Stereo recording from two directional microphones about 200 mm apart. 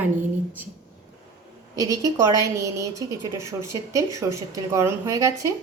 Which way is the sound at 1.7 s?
15° right (ahead or behind).